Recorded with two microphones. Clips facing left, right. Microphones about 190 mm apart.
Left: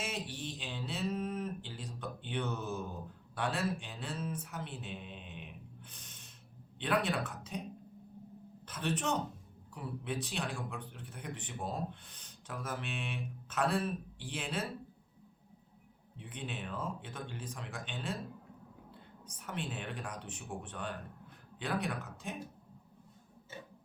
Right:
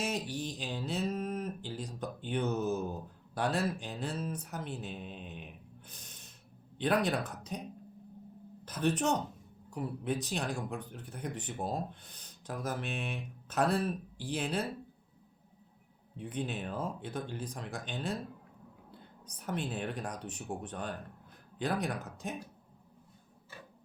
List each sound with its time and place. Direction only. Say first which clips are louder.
0.0 s a sound: right 5 dB; 40° right (ahead or behind)
6.7 s speech: right 3 dB; 40° right (ahead or behind)
8.6 s speech: right 5 dB; 40° right (ahead or behind)
16.1 s speech: right 6 dB; 40° right (ahead or behind)
19.2 s speech: right 4 dB; 40° right (ahead or behind)